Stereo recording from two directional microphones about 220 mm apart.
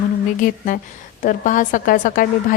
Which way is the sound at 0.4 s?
40° left (ahead or behind).